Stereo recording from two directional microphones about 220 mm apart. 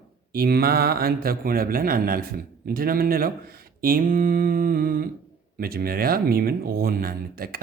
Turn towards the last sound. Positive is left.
turn(degrees=-40)  # may be behind; listen again after turning